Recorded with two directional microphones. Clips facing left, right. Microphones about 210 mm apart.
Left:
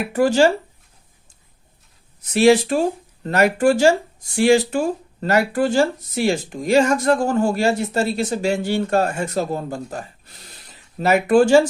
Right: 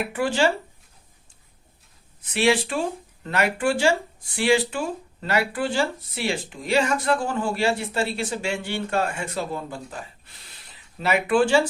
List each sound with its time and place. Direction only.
0.1 s speech: 40° left (ahead or behind)
2.2 s speech: 40° left (ahead or behind)